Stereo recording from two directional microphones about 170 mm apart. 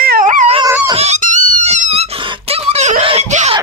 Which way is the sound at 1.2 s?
50° right (ahead or behind).